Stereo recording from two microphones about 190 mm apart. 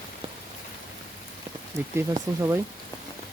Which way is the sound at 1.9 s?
15° right (ahead or behind).